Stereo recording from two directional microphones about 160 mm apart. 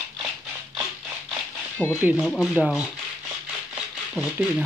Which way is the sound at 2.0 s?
5° right (ahead or behind).